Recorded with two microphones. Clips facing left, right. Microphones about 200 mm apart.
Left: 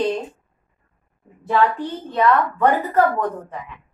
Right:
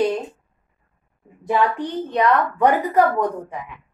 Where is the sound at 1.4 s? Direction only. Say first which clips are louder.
Left 1 dB; 15° right (ahead or behind).